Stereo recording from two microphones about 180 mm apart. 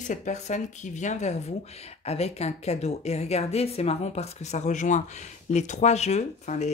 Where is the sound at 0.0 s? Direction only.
45° left (ahead or behind).